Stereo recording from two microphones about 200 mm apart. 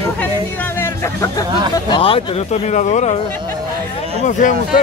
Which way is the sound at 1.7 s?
25° left (ahead or behind).